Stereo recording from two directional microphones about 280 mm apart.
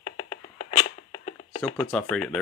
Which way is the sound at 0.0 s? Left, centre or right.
Left.